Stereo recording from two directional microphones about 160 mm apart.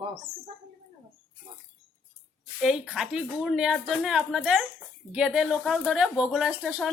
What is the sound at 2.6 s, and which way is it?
A woman's voice, centre (ahead or behind).